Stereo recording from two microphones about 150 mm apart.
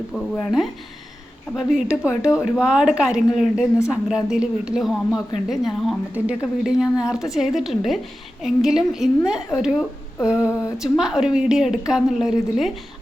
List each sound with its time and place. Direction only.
0.1 s a woman's voice: 5° left (ahead or behind)
10.2 s a sound: 5° right (ahead or behind)
10.5 s speech: 20° left (ahead or behind)
10.8 s a woman's voice: 5° right (ahead or behind)